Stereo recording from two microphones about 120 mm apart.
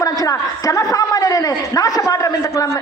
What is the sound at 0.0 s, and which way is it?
A man's voice, 30° left (ahead or behind).